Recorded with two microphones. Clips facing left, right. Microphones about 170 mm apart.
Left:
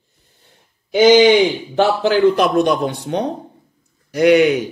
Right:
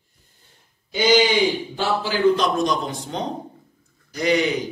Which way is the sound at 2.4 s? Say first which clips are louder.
Left 6 dB; 65° left (ahead or behind).